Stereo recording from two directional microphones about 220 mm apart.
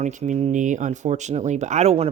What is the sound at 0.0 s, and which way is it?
Speech, 35° right (ahead or behind).